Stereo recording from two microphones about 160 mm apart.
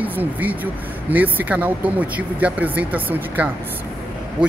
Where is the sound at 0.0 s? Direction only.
10° right (ahead or behind).